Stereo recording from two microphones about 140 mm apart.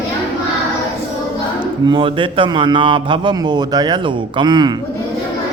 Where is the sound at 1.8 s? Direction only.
35° right (ahead or behind).